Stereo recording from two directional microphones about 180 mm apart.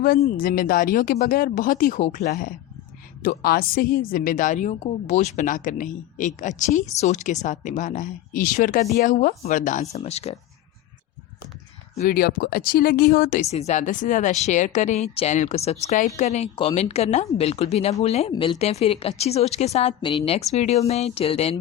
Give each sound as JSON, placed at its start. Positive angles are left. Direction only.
{"t": 0.3, "sound": "a woman's voice", "side_deg": 50}
{"t": 12.0, "sound": "speech", "side_deg": 55}
{"t": 13.4, "sound": "speech", "side_deg": 35}